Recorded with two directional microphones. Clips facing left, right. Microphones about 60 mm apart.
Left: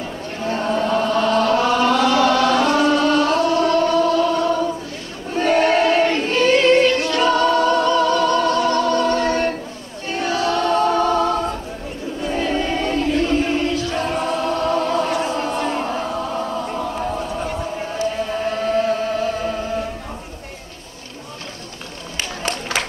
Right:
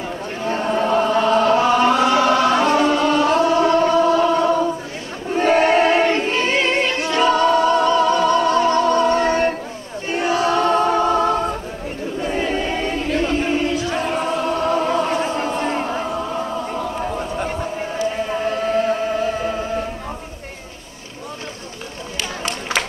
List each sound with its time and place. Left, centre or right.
0.5 s chant: right
5.3 s singing: right
10.0 s choir: right
13.5 s a sound: centre
14.1 s chant: centre
16.1 s chant: centre
17.7 s music: right
22.1 s run: left